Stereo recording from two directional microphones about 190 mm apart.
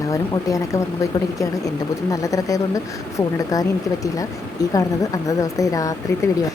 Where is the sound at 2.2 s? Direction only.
15° left (ahead or behind).